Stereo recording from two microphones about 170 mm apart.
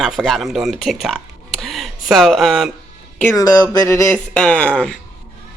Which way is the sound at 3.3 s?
20° left (ahead or behind).